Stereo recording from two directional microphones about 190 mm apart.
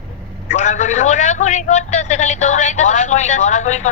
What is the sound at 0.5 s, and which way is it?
A man's voice, 40° left (ahead or behind).